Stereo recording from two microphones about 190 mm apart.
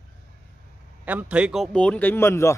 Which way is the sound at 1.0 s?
10° right (ahead or behind).